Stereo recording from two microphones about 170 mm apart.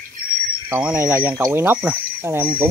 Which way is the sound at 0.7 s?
10° right (ahead or behind).